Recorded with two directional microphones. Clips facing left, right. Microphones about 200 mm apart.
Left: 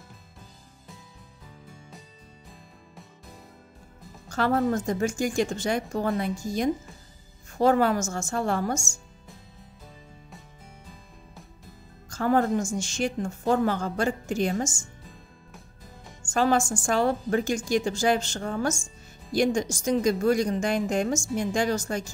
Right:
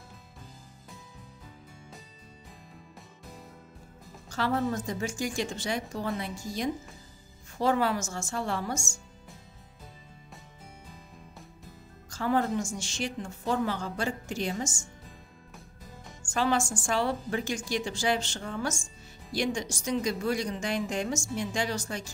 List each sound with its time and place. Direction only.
4.3 s a woman's voice: 50° left (ahead or behind)
12.1 s a woman's voice: 50° left (ahead or behind)
16.3 s a woman's voice: 45° left (ahead or behind)